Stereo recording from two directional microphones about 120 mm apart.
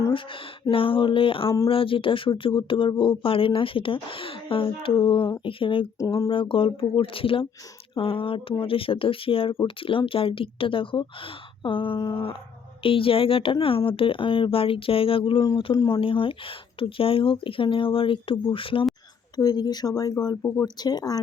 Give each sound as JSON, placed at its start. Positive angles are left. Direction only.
{"t": 0.1, "sound": "speech", "side_deg": 45}
{"t": 15.7, "sound": "speech", "side_deg": 30}
{"t": 16.0, "sound": "speech", "side_deg": 45}
{"t": 19.4, "sound": "speech", "side_deg": 35}